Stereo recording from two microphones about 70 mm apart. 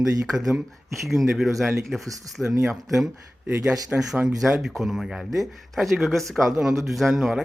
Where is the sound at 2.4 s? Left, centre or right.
Left.